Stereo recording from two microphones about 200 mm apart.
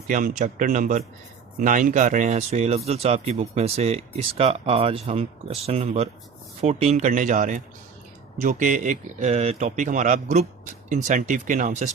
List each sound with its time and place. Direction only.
0.1 s speech: 40° right (ahead or behind)